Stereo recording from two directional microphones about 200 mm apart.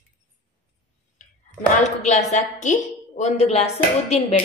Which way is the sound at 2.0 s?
35° left (ahead or behind).